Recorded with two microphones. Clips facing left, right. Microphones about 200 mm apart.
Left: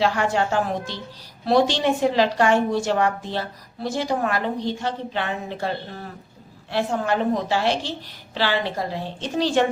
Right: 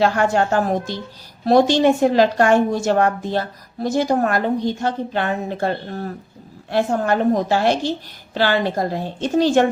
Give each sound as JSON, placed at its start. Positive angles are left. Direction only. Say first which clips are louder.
{"t": 0.0, "sound": "a woman's voice", "louder": "right 4 dB", "side_deg": -45}